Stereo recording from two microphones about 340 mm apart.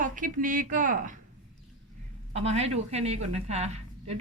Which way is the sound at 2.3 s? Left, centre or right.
Centre.